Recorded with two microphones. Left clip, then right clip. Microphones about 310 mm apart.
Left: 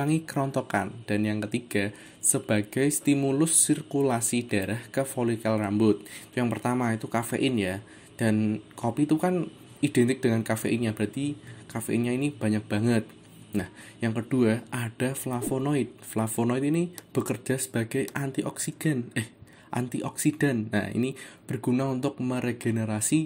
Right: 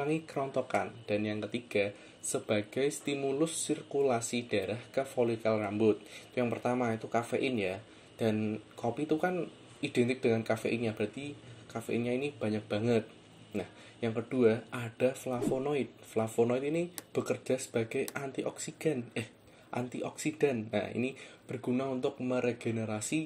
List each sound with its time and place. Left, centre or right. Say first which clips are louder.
0.0 s speech: left 5 dB; left